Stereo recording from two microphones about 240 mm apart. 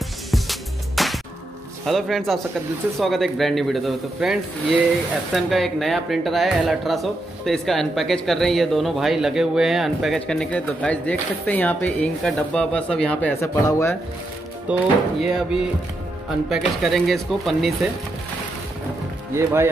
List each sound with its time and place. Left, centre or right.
0.3 s music: centre
1.9 s speech: centre
14.7 s speech: centre
19.3 s speech: centre